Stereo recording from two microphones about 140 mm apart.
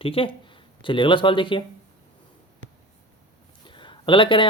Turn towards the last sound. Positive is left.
turn(degrees=35)  # may be behind; listen again after turning